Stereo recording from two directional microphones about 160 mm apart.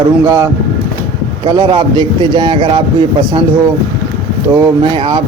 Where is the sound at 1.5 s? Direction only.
30° right (ahead or behind).